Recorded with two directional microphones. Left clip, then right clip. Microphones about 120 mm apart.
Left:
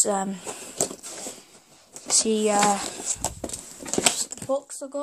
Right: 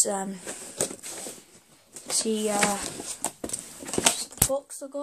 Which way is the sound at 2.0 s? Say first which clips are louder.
Left 5 dB; 65° left (ahead or behind).